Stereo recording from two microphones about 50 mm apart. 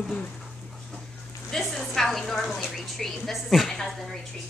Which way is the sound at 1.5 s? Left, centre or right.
Centre.